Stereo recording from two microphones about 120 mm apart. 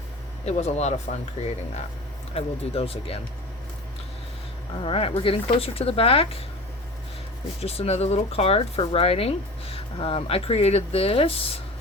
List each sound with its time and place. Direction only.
0.4 s speech: 65° left (ahead or behind)
2.3 s speech: 55° left (ahead or behind)
4.8 s speech: 50° left (ahead or behind)
7.6 s speech: 55° left (ahead or behind)